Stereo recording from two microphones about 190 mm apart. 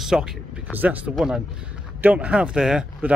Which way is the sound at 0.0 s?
5° right (ahead or behind).